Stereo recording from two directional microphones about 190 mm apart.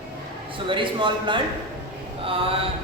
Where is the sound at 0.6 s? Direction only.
25° right (ahead or behind).